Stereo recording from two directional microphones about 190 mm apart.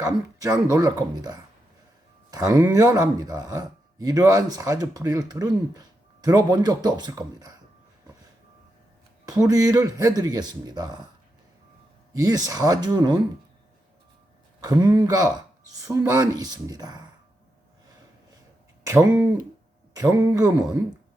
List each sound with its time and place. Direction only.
0.0 s speech: 20° right (ahead or behind)
9.3 s speech: 20° right (ahead or behind)
12.1 s speech: 20° right (ahead or behind)
14.6 s speech: 20° right (ahead or behind)
18.9 s speech: 15° right (ahead or behind)